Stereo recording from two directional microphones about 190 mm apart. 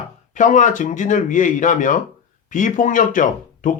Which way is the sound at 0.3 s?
40° left (ahead or behind).